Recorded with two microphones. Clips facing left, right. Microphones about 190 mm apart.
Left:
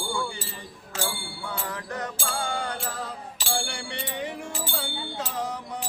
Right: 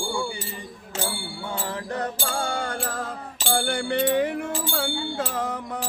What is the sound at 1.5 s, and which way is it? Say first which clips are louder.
Music: right 4 dB; 30° right (ahead or behind).